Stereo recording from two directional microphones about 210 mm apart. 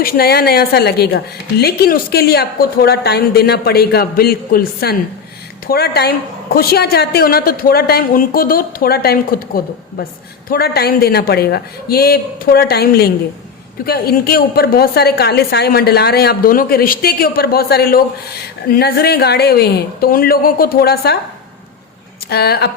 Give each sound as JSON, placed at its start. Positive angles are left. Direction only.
{"t": 0.0, "sound": "a woman's voice", "side_deg": 45}
{"t": 10.5, "sound": "a woman's voice", "side_deg": 50}
{"t": 22.3, "sound": "a woman's voice", "side_deg": 50}